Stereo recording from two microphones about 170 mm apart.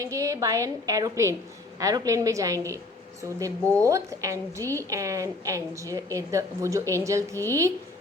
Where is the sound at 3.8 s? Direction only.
20° right (ahead or behind).